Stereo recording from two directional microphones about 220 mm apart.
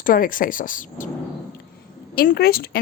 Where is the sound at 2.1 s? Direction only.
45° left (ahead or behind).